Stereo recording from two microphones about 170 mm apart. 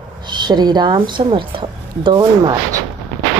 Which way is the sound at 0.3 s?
25° right (ahead or behind).